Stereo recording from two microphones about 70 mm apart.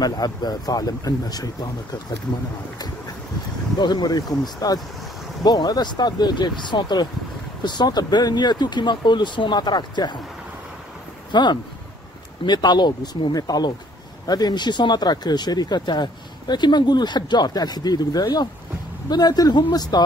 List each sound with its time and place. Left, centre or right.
0.0 s speech: left
3.7 s speech: left
11.3 s speech: left